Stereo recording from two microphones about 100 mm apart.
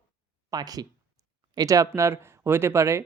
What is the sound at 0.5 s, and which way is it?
Speech, 40° right (ahead or behind).